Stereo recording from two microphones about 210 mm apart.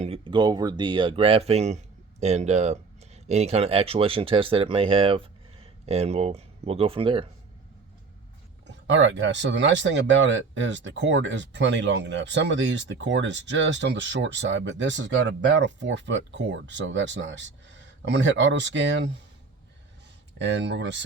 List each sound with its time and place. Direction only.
0.0 s speech: 25° right (ahead or behind)
8.6 s speech: 60° right (ahead or behind)
20.4 s speech: 55° right (ahead or behind)